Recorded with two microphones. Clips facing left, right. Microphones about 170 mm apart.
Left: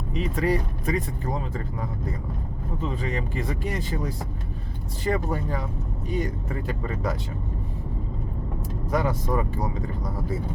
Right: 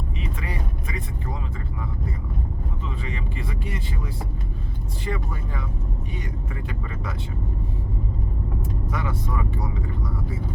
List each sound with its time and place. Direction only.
0.3 s speech: 40° left (ahead or behind)
8.9 s speech: 40° left (ahead or behind)